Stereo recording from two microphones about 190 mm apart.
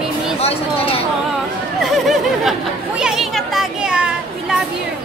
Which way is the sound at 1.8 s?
Centre (ahead or behind).